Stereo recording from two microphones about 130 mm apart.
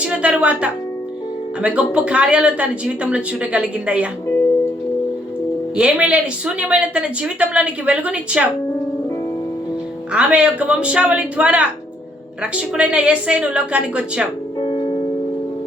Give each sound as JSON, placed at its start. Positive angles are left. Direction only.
{"t": 0.0, "sound": "a woman's voice", "side_deg": -10}
{"t": 5.7, "sound": "a woman's voice", "side_deg": -10}
{"t": 10.1, "sound": "a woman's voice", "side_deg": -10}
{"t": 14.6, "sound": "music", "side_deg": 45}